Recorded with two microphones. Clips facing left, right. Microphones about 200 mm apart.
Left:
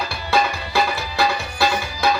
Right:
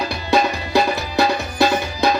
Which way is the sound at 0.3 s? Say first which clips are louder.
Right 3 dB; 20° right (ahead or behind).